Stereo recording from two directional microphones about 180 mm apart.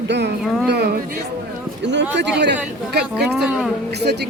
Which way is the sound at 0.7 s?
65° right (ahead or behind).